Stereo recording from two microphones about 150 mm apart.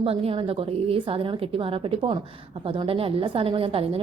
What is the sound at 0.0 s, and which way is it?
A woman's voice, 40° right (ahead or behind).